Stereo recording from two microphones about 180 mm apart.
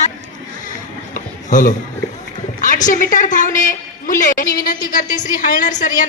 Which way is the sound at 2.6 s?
45° left (ahead or behind).